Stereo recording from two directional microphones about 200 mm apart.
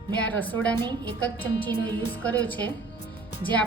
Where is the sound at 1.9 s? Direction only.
10° left (ahead or behind).